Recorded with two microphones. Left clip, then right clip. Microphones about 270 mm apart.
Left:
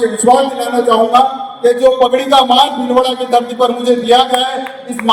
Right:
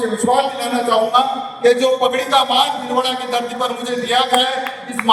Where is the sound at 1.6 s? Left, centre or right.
Left.